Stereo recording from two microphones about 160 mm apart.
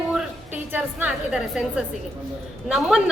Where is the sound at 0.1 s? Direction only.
10° right (ahead or behind).